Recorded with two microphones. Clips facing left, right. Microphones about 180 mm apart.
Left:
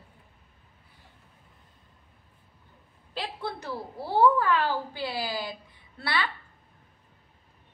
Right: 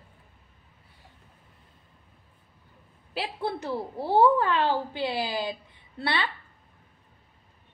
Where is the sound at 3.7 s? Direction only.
20° right (ahead or behind).